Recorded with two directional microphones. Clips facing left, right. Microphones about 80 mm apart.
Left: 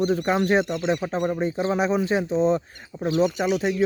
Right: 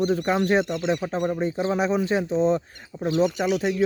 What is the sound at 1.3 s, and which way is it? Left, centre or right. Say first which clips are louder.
Speech: even; left.